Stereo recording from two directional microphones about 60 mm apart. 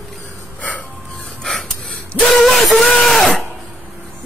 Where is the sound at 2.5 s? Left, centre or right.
Centre.